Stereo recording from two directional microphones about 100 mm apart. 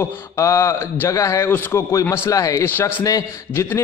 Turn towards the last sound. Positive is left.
turn(degrees=35)  # may be behind; listen again after turning